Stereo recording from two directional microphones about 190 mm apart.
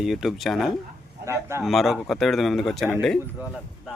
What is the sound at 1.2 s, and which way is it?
Speech, 15° right (ahead or behind).